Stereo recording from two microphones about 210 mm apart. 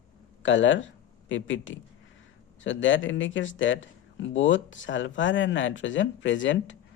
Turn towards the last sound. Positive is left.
turn(degrees=65)  # may be behind; listen again after turning